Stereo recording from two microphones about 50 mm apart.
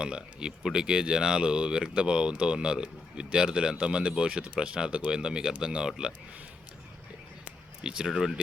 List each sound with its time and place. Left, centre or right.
0.0 s speech: centre
7.9 s speech: centre